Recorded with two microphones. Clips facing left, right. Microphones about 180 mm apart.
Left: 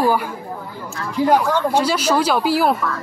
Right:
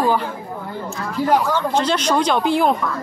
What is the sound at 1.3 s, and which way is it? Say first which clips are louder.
Speech: left 1 dB; 10° left (ahead or behind).